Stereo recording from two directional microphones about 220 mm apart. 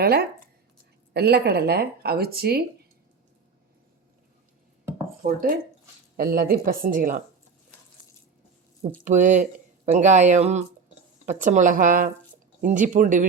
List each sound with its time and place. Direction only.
0.0 s speech: 45° right (ahead or behind)
6.1 s speech: 40° right (ahead or behind)
9.0 s speech: 35° right (ahead or behind)